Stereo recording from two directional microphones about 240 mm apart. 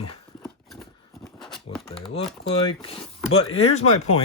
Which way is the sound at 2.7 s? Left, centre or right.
Left.